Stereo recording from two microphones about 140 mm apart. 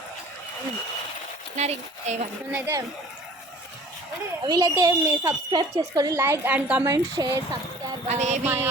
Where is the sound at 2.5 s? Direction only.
15° right (ahead or behind).